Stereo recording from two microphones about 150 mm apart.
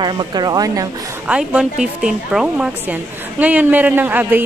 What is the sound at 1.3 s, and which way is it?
A man's voice, 5° right (ahead or behind).